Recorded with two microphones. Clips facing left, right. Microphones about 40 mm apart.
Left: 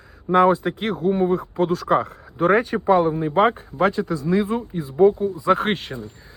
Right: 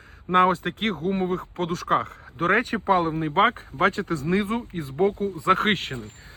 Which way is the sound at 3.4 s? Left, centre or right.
Right.